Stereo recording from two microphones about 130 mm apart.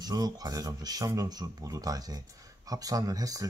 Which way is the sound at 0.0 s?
30° right (ahead or behind).